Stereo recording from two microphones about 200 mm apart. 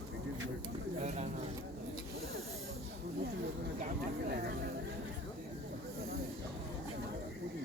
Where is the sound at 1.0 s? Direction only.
35° right (ahead or behind).